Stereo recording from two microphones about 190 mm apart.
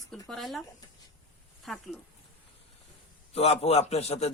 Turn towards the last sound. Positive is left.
turn(degrees=35)  # may be behind; listen again after turning